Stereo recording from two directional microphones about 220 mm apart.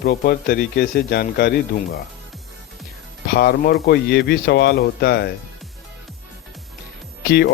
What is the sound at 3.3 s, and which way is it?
Speech, 45° left (ahead or behind).